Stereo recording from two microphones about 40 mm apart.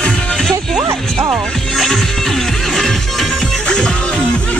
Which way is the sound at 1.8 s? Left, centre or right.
Centre.